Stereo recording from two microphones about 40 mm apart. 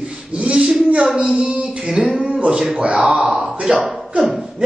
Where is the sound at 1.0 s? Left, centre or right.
Centre.